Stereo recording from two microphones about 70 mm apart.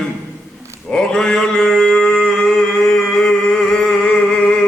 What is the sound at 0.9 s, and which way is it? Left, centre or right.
Male singing, centre.